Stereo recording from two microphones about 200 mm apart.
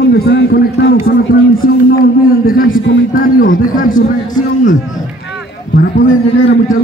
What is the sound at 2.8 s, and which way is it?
Speech, 65° left (ahead or behind).